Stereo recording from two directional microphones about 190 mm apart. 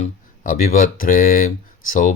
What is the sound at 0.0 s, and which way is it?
Speech, 45° left (ahead or behind).